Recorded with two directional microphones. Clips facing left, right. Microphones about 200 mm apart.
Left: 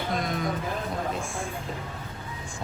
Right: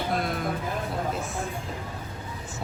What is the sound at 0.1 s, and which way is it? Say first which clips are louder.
Music: left 1 dB; 5° right (ahead or behind).